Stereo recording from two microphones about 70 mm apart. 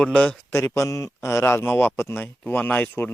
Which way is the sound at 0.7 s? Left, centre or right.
Left.